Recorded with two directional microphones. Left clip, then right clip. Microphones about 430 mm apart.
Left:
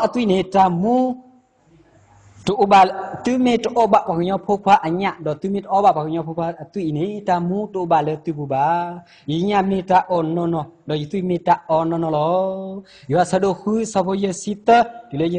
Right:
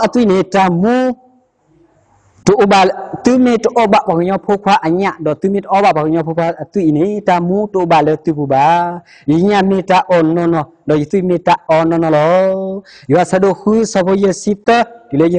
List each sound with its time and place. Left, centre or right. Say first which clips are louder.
0.0 s a man's voice: right 7 dB; right
2.4 s a man's voice: right 4 dB; right